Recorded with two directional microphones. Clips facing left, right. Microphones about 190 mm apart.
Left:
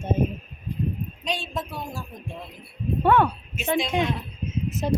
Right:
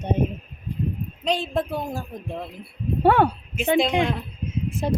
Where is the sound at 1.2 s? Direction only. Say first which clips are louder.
Right 8 dB; 55° right (ahead or behind).